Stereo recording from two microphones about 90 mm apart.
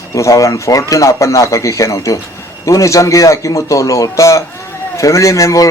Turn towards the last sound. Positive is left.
turn(degrees=35)  # may be behind; listen again after turning